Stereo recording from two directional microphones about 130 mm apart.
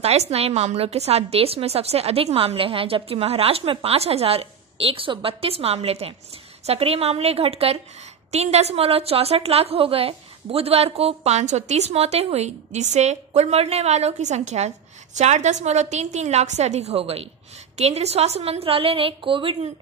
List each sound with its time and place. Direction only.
0.0 s a woman's voice: 55° right (ahead or behind)